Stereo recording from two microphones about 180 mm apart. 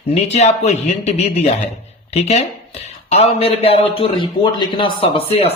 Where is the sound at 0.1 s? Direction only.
35° left (ahead or behind).